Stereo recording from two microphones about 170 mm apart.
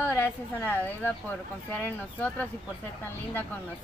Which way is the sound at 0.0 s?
15° left (ahead or behind).